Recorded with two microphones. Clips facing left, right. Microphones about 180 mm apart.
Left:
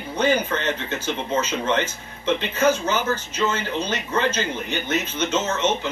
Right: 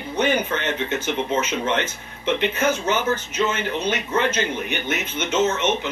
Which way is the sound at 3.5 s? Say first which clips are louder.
Right 1 dB; 15° right (ahead or behind).